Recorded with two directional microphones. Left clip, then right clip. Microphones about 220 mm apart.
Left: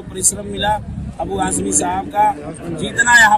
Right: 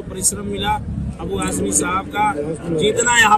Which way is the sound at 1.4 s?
5° left (ahead or behind).